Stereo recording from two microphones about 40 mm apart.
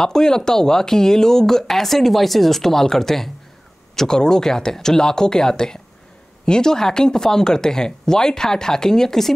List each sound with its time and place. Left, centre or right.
0.0 s speech: centre